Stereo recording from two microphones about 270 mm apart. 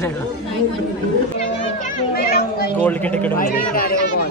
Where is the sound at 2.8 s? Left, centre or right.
Centre.